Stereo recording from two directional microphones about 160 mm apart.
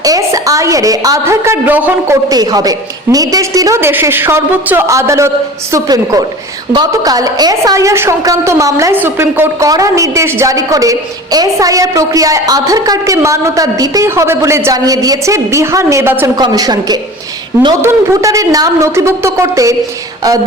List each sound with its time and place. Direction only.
0.0 s a woman's voice: 20° right (ahead or behind)
2.3 s a woman's voice: 25° right (ahead or behind)